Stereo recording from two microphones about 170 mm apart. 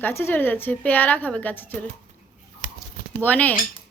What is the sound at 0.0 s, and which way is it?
A woman's voice, 15° left (ahead or behind).